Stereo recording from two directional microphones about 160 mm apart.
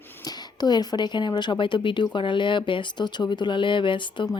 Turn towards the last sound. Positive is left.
turn(degrees=30)  # may be behind; listen again after turning